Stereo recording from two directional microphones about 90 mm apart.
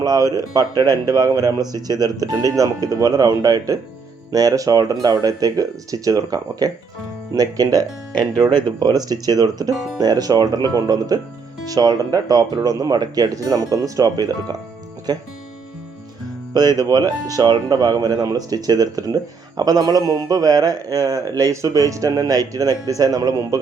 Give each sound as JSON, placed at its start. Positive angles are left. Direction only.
{"t": 0.0, "sound": "speech", "side_deg": -45}
{"t": 16.6, "sound": "speech", "side_deg": -45}